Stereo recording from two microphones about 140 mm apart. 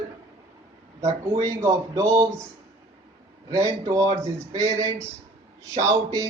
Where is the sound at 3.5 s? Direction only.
25° right (ahead or behind).